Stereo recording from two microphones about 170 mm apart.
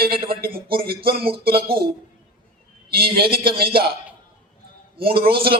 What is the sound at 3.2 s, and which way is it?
Speech, 30° right (ahead or behind).